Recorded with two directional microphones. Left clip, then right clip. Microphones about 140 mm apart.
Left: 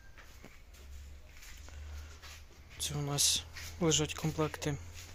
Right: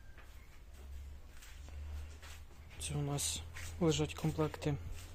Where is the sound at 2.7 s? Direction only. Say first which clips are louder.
Left 7 dB; centre (ahead or behind).